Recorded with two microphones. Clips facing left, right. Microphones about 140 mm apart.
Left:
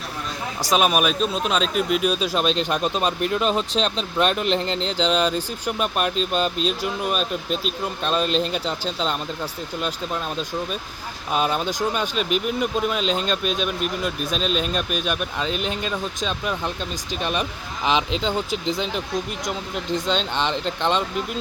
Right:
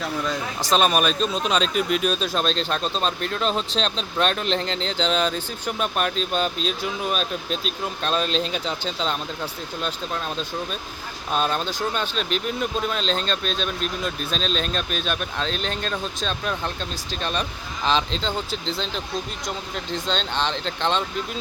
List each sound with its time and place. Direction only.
0.6 s speech: 10° left (ahead or behind)
11.3 s speech: 5° left (ahead or behind)